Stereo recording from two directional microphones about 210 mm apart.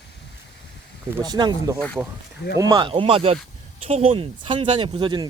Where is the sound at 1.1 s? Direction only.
20° right (ahead or behind).